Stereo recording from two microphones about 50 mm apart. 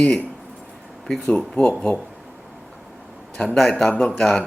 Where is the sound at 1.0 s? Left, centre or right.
Centre.